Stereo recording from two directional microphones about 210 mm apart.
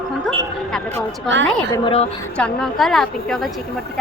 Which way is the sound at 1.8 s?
30° left (ahead or behind).